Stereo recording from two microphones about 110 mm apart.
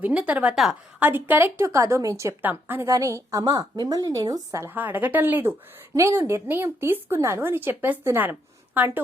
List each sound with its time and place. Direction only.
0.0 s a woman's voice: 10° right (ahead or behind)
0.9 s a woman's voice: 15° right (ahead or behind); by 4.7 s 30° right (ahead or behind)
4.7 s a woman's voice: 15° right (ahead or behind)